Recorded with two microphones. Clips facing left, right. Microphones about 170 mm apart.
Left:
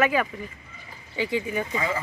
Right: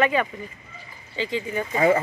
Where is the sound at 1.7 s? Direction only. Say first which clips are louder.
Right 9 dB; 55° right (ahead or behind).